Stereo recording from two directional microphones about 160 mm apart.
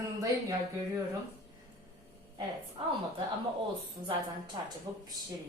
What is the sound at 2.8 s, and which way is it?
Speech, 30° right (ahead or behind).